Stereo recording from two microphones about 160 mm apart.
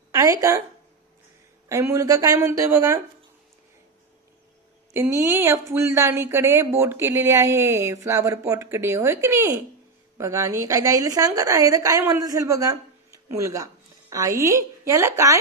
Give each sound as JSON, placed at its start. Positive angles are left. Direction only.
{"t": 0.1, "sound": "a sound", "side_deg": -20}
{"t": 1.7, "sound": "a woman's voice", "side_deg": -20}
{"t": 5.1, "sound": "a woman's voice", "side_deg": -15}